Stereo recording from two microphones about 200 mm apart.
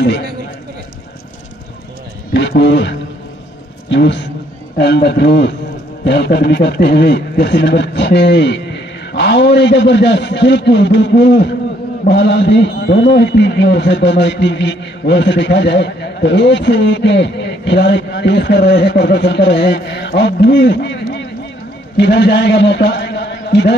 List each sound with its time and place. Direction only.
2.3 s a man's voice: 60° left (ahead or behind)